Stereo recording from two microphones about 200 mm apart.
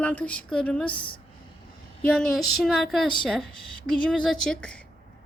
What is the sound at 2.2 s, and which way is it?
A woman's voice, centre (ahead or behind).